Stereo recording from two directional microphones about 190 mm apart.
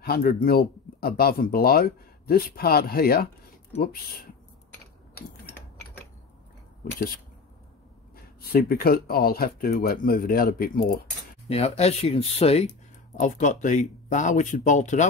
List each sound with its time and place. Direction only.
0.0 s speech: 55° left (ahead or behind)
8.4 s speech: 55° left (ahead or behind)
11.4 s speech: 35° left (ahead or behind)